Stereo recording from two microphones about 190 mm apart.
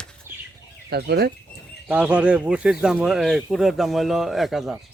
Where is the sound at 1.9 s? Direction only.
5° right (ahead or behind).